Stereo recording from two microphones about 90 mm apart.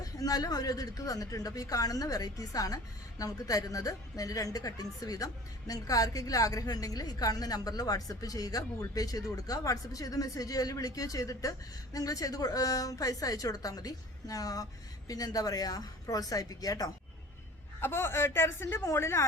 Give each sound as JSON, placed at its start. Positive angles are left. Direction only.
{"t": 0.0, "sound": "a woman's voice", "side_deg": 45}
{"t": 17.7, "sound": "speech", "side_deg": 25}